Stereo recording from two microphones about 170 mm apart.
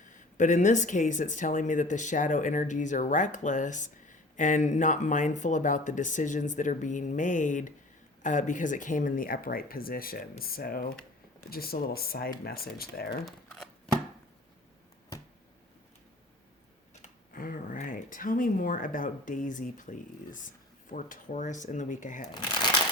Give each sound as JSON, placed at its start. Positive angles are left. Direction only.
{"t": 0.1, "sound": "speech", "side_deg": 45}
{"t": 13.2, "sound": "a sound", "side_deg": 5}
{"t": 17.0, "sound": "speech", "side_deg": 55}